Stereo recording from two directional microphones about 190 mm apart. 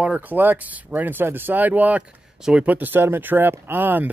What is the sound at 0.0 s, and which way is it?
Speech, 5° right (ahead or behind).